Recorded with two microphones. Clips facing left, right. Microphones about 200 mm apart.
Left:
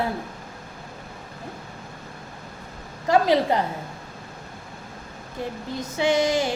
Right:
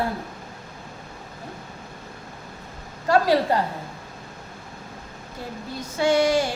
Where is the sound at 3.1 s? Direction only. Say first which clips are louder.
Even; 20° left (ahead or behind).